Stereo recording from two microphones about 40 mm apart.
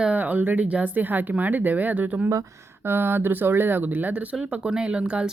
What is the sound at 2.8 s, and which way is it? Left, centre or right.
Speech, right.